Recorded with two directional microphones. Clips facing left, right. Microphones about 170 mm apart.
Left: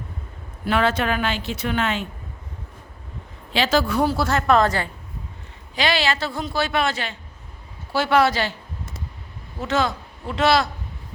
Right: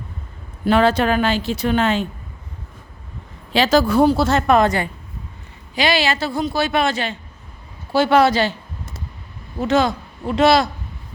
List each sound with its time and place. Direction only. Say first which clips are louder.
0.6 s speech: right 5 dB; 30° right (ahead or behind)
3.5 s speech: right 5 dB; 40° right (ahead or behind)
4.0 s a man's voice: right 5 dB; 20° right (ahead or behind)
9.6 s a man's voice: right 5 dB; 15° right (ahead or behind)